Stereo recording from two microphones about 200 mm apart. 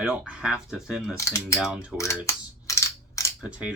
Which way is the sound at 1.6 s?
5° right (ahead or behind).